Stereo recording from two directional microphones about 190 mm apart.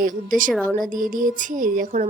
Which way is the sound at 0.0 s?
45° right (ahead or behind).